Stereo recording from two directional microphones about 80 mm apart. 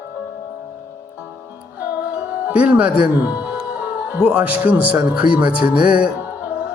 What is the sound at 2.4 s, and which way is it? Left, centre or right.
Speech, centre.